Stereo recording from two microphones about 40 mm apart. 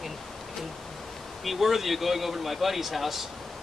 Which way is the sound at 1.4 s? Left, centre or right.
Centre.